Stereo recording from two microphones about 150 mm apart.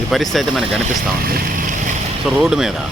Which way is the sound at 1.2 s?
80° right.